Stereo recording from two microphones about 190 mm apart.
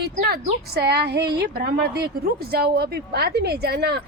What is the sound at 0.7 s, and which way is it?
A woman's voice, 60° right (ahead or behind).